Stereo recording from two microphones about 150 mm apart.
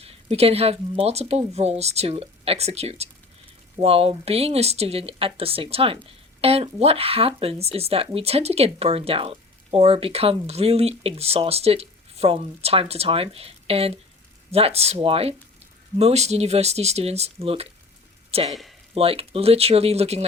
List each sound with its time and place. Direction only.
0.0 s speech: 40° right (ahead or behind)